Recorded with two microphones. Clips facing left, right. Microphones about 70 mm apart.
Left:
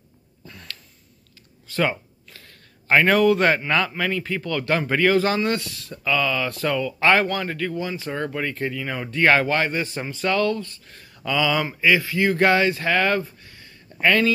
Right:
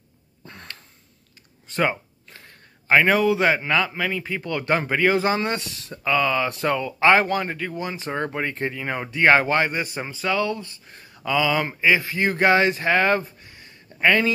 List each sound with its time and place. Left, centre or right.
0.5 s a sound: right
2.9 s a man's voice: centre
4.4 s a man's voice: right
10.5 s speech: centre